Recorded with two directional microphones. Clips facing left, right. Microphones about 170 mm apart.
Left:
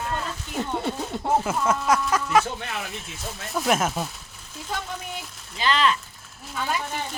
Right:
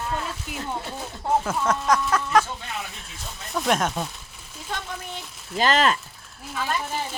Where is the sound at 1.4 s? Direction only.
5° left (ahead or behind).